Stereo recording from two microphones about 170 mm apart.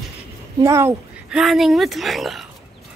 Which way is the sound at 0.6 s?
15° right (ahead or behind).